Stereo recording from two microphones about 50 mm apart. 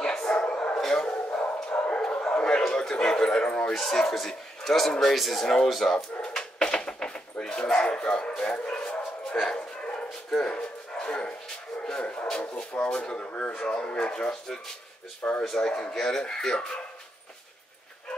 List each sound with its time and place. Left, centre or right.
0.0 s bow-wow: centre
0.3 s bow-wow: left
0.7 s bow-wow: centre
1.0 s dog: left
2.0 s bow-wow: centre
3.7 s speech: centre
6.2 s dog: centre
8.4 s bow-wow: left
12.0 s a sound: left
12.8 s speech: centre
13.5 s speech: centre
15.5 s speech: centre